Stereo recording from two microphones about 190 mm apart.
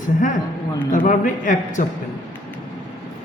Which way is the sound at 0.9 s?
40° left (ahead or behind).